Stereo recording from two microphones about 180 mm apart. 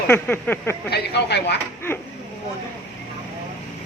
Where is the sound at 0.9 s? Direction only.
65° left (ahead or behind).